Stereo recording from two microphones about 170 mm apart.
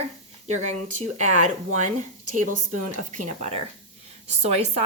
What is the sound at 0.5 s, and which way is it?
Speech, 45° right (ahead or behind).